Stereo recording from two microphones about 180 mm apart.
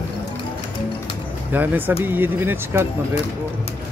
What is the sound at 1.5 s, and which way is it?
Speech, 10° right (ahead or behind).